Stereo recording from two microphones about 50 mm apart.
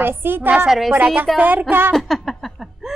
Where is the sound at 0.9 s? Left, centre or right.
Right.